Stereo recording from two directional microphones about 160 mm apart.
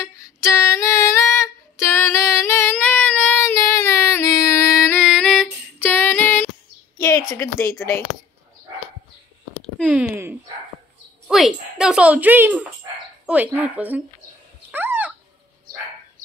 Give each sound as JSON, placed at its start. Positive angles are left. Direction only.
{"t": 0.0, "sound": "music", "side_deg": 20}
{"t": 5.0, "sound": "music", "side_deg": 0}
{"t": 5.8, "sound": "music", "side_deg": 15}
{"t": 7.0, "sound": "speech", "side_deg": 20}
{"t": 9.8, "sound": "speech", "side_deg": 10}
{"t": 11.2, "sound": "speech", "side_deg": -5}
{"t": 14.7, "sound": "a sound", "side_deg": -10}